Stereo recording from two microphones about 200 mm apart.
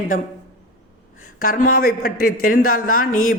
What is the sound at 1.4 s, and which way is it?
Speech, 45° left (ahead or behind).